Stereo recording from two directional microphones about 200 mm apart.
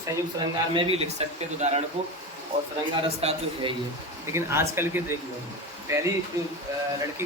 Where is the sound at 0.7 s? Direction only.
30° right (ahead or behind).